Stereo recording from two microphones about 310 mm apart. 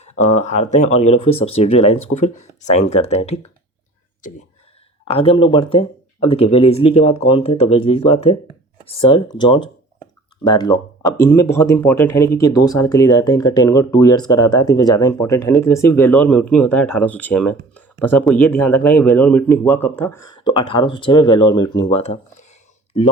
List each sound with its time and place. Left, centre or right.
0.0 s speech: left
5.0 s speech: centre